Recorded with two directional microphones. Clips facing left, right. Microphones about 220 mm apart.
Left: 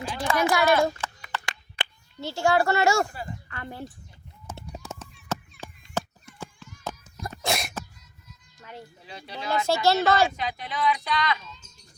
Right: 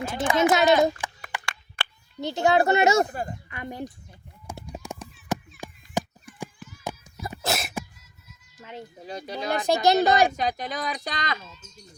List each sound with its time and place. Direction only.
0.2 s speech: 20° right (ahead or behind)
1.3 s clapping: 15° right (ahead or behind)
1.8 s a sound: 20° left (ahead or behind)
2.2 s speech: 20° right (ahead or behind)
3.1 s speech: 50° right (ahead or behind)
3.5 s speech: 15° right (ahead or behind)
4.6 s a sound: 15° right (ahead or behind)
6.8 s sneeze: 10° right (ahead or behind)
7.7 s cat: 15° right (ahead or behind)
8.6 s speech: 20° right (ahead or behind)
9.0 s speech: 45° right (ahead or behind)
9.6 s speech: 15° right (ahead or behind)
10.3 s speech: 45° right (ahead or behind)